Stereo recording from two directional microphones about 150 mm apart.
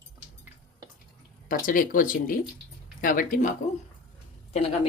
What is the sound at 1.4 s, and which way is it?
Speech, 65° left (ahead or behind).